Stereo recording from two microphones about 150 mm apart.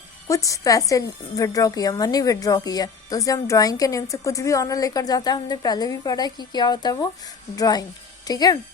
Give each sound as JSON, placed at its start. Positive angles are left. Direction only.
{"t": 0.3, "sound": "a woman's voice", "side_deg": 20}